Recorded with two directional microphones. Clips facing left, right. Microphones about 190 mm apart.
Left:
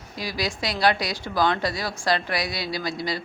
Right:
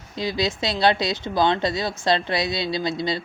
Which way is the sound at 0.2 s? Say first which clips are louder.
Right 4 dB; 25° right (ahead or behind).